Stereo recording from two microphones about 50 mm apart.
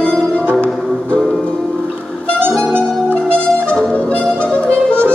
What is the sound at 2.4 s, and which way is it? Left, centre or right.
Music, centre.